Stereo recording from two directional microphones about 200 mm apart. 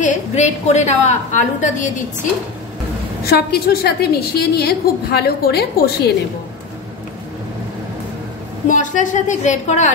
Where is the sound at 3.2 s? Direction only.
50° left (ahead or behind).